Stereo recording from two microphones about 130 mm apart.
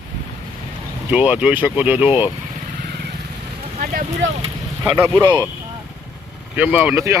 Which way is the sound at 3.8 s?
90° right.